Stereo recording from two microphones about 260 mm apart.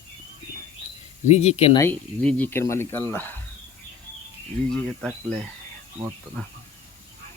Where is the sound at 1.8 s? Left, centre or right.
Centre.